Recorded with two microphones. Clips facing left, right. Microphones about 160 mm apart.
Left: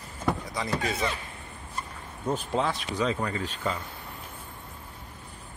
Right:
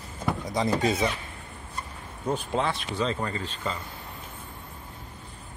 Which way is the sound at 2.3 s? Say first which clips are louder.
Even; centre (ahead or behind).